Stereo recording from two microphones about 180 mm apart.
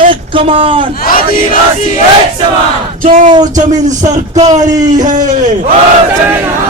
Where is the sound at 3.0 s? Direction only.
45° right (ahead or behind).